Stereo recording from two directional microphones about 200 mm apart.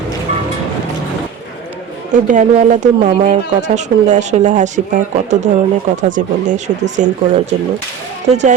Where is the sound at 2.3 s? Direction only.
40° right (ahead or behind).